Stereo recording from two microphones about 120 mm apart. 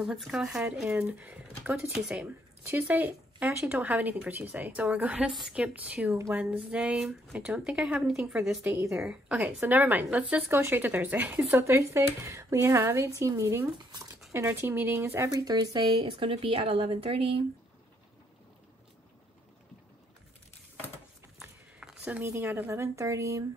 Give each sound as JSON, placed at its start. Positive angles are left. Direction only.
{"t": 0.0, "sound": "speech", "side_deg": -5}
{"t": 8.6, "sound": "speech", "side_deg": -20}
{"t": 8.9, "sound": "speech", "side_deg": -5}
{"t": 16.0, "sound": "a woman's voice", "side_deg": -50}
{"t": 21.7, "sound": "a sound", "side_deg": -10}
{"t": 22.2, "sound": "speech", "side_deg": -20}